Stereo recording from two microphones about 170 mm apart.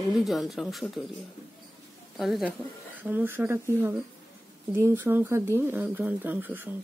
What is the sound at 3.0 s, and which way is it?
Speech, 10° right (ahead or behind).